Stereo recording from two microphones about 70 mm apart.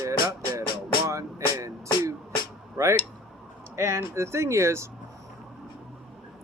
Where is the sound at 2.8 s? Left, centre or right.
Right.